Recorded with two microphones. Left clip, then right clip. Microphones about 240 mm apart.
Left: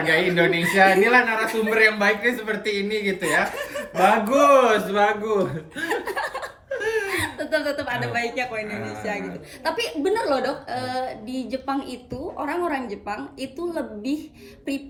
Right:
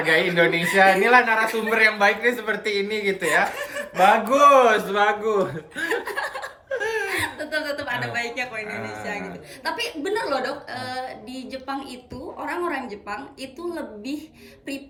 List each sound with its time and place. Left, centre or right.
0.0 s a man's voice: centre
5.9 s chuckle: centre
6.7 s laughter: centre
7.1 s a woman's voice: centre
9.6 s a woman's voice: centre